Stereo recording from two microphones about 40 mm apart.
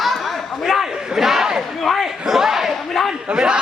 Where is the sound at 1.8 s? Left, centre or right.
Centre.